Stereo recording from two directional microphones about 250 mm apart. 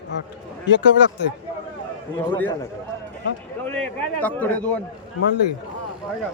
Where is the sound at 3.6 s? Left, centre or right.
Centre.